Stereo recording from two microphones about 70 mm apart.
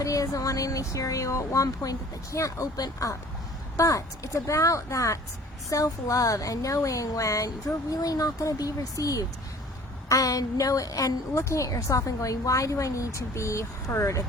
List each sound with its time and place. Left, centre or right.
0.0 s a woman's voice: left